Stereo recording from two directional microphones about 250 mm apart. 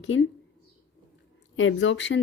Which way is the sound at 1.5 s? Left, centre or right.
Left.